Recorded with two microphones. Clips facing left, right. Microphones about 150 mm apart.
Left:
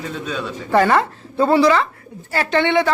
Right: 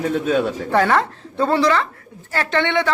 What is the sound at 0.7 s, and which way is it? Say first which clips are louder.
A woman's voice: left 5 dB; centre (ahead or behind).